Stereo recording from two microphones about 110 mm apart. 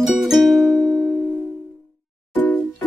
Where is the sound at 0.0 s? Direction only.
Centre (ahead or behind).